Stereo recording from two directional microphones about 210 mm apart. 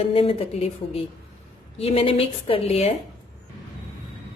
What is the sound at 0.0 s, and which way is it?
A woman's voice, 25° left (ahead or behind).